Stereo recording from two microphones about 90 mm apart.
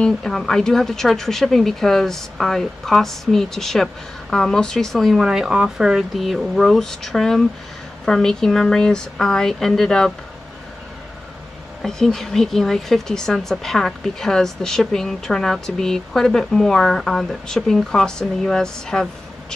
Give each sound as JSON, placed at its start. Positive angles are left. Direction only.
{"t": 0.0, "sound": "a woman's voice", "side_deg": 5}
{"t": 11.8, "sound": "a woman's voice", "side_deg": 5}